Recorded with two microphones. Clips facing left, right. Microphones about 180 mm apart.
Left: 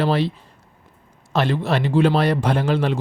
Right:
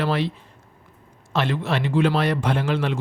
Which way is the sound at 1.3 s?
35° left (ahead or behind).